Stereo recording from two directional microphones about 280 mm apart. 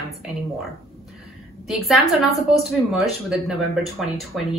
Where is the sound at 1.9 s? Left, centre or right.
Centre.